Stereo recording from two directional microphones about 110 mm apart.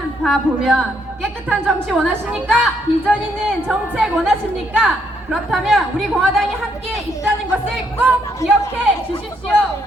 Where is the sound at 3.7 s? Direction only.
5° right (ahead or behind).